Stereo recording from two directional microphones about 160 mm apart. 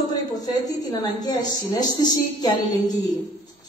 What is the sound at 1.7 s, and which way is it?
A woman's voice, 25° left (ahead or behind).